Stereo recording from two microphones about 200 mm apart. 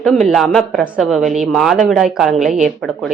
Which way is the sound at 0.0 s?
Centre (ahead or behind).